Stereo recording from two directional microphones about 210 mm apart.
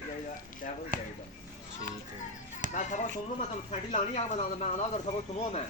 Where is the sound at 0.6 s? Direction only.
40° left (ahead or behind).